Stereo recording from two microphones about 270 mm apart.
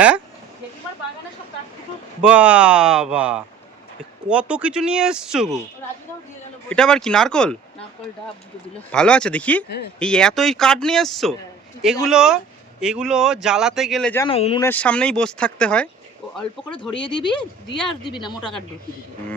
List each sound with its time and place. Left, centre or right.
2.2 s speech: centre
6.7 s speech: centre
8.9 s speech: centre
14.3 s speech: left
14.6 s speech: centre
16.6 s speech: centre